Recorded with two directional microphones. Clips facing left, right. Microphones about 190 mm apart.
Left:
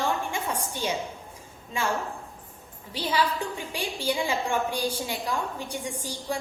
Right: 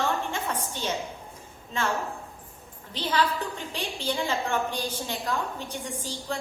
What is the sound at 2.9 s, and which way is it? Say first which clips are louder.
A woman's voice: even; 10° left (ahead or behind).